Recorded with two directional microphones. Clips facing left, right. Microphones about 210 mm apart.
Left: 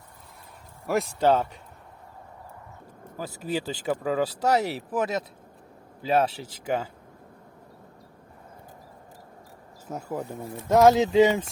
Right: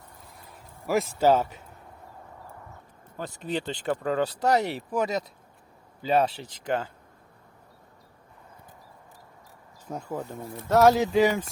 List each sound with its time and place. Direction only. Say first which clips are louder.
0.9 s speech: right 1 dB; centre (ahead or behind)
3.2 s speech: left 1 dB; 5° left (ahead or behind)
9.8 s speech: left 1 dB; 10° left (ahead or behind)